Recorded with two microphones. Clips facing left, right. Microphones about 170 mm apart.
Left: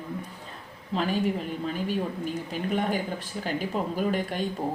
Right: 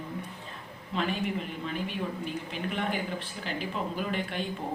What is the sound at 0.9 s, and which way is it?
A woman's voice, 40° left (ahead or behind).